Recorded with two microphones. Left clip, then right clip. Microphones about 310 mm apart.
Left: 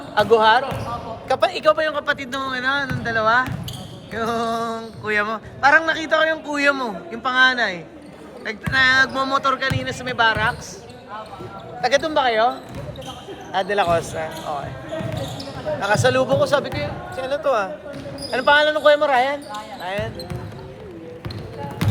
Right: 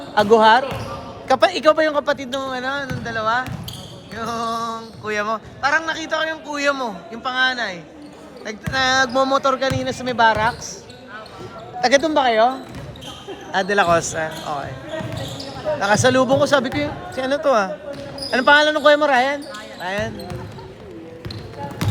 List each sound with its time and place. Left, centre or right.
0.1 s a man's voice: right
11.8 s a man's voice: right
15.8 s a man's voice: right
19.8 s basketball bounce: right
21.8 s music: centre